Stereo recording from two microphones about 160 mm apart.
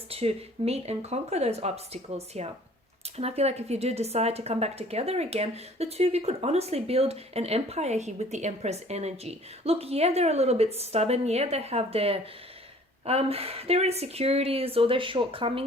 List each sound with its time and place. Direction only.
0.1 s speech: 40° right (ahead or behind)